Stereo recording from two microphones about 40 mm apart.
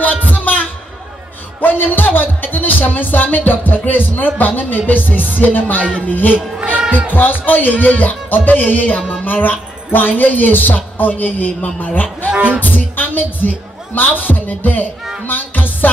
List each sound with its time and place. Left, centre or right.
0.1 s music: left
1.6 s speech: left
5.8 s speech: right
6.0 s speech: left
6.3 s speech: right
7.4 s speech: left
12.3 s speech: right
12.5 s a man's voice: left
15.2 s music: left